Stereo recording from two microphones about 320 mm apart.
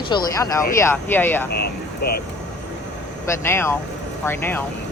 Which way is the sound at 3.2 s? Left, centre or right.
Centre.